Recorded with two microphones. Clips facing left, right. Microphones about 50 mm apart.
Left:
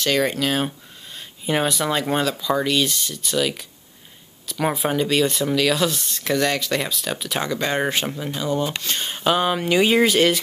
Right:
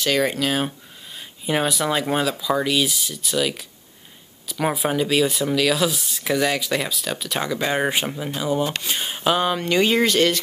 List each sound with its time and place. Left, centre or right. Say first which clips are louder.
0.0 s speech: even; centre